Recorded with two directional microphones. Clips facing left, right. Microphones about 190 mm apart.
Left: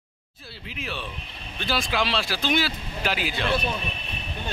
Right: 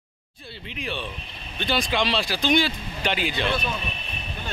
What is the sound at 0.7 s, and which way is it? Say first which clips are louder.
Speech: right 2 dB; 5° left (ahead or behind).